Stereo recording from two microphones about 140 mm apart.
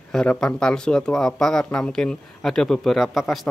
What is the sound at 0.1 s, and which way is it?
Speech, 5° left (ahead or behind).